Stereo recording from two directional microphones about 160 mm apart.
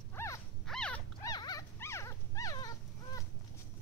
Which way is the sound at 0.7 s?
5° left (ahead or behind).